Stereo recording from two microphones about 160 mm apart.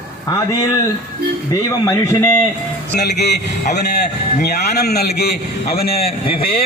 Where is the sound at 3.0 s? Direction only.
90° left.